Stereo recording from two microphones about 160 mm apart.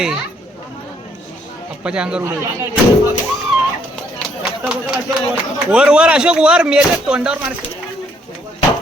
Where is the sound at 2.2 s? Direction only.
15° right (ahead or behind).